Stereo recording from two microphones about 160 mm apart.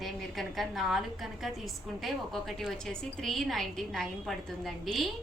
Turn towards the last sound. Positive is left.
turn(degrees=0)  # may be behind; listen again after turning